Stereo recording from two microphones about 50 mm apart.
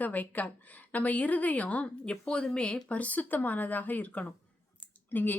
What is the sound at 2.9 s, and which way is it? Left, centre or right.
Speech, left.